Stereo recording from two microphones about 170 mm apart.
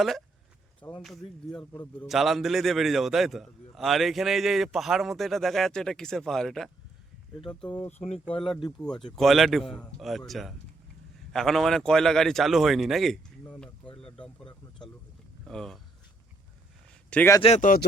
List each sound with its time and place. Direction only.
0.8 s speech: 15° left (ahead or behind)
1.0 s a man's voice: centre (ahead or behind)
9.1 s a man's voice: centre (ahead or behind)
13.4 s a sound: 10° left (ahead or behind)
15.4 s a man's voice: centre (ahead or behind)
17.1 s a man's voice: 10° left (ahead or behind)
17.4 s speech: 45° left (ahead or behind)